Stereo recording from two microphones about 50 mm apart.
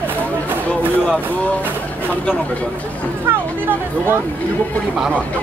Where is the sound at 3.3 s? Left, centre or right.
Right.